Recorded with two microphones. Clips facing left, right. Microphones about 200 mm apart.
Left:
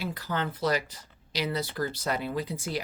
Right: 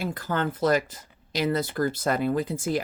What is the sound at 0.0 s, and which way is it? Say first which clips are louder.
Speech: right 4 dB; 50° right (ahead or behind).